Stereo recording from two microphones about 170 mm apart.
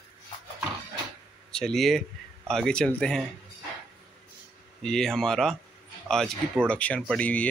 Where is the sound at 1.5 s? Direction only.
Centre (ahead or behind).